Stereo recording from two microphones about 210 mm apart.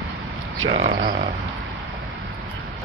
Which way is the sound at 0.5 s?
70° right (ahead or behind).